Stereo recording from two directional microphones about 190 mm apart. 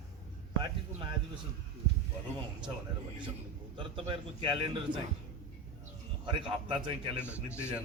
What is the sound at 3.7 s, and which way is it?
A man's voice, 25° right (ahead or behind).